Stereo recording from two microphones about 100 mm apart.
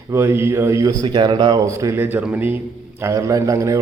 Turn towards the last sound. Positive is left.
turn(degrees=-30)  # may be behind; listen again after turning